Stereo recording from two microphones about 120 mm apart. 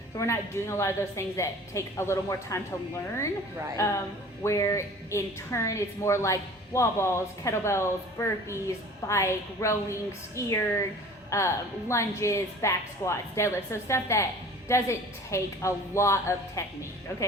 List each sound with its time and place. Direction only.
0.2 s a woman's voice: 25° left (ahead or behind)